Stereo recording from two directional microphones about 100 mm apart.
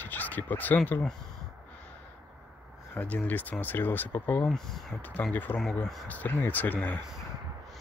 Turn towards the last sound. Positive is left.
turn(degrees=15)  # may be behind; listen again after turning